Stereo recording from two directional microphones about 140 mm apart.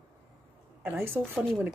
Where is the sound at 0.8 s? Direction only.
15° right (ahead or behind).